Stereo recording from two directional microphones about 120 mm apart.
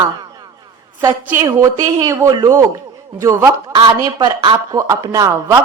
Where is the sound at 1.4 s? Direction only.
30° right (ahead or behind).